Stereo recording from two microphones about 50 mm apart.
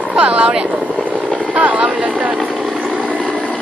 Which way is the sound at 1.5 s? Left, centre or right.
Right.